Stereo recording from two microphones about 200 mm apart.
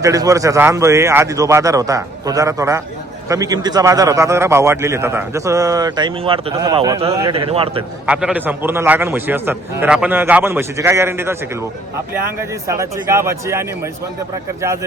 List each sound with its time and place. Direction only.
0.0 s a man's voice: 15° right (ahead or behind)
8.0 s a man's voice: 5° right (ahead or behind)